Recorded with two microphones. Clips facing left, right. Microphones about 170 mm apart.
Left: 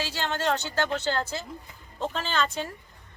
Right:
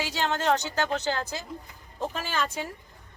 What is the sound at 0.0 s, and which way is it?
Speech, 15° right (ahead or behind).